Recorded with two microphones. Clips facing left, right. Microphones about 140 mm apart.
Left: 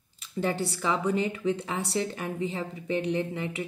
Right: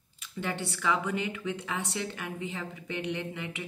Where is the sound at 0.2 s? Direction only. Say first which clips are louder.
Left 6 dB; 35° left (ahead or behind).